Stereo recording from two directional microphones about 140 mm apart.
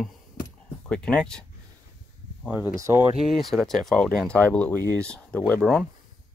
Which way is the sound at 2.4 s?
10° right (ahead or behind).